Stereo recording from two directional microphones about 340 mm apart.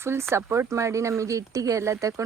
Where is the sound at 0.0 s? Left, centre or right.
Centre.